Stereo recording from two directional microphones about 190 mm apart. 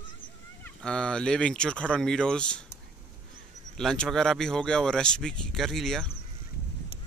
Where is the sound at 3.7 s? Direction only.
5° left (ahead or behind).